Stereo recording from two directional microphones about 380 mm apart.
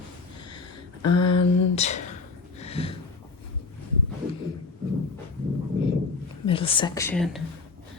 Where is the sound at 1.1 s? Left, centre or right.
Left.